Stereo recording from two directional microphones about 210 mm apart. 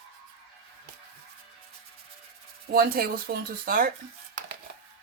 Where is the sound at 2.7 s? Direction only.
45° right (ahead or behind).